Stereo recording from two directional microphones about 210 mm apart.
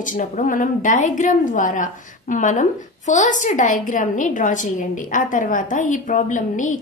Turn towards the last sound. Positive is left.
turn(degrees=35)  # may be behind; listen again after turning